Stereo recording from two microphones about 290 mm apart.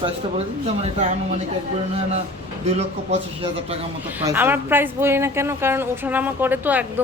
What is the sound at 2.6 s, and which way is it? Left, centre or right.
A man's voice, right.